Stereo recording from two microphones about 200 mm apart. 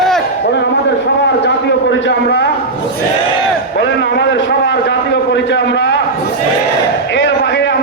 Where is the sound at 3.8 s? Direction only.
65° left (ahead or behind).